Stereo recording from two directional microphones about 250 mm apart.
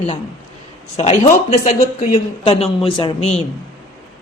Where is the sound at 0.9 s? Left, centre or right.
Left.